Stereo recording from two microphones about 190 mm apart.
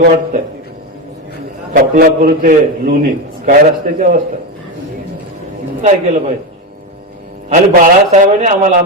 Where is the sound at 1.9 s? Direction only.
45° right (ahead or behind).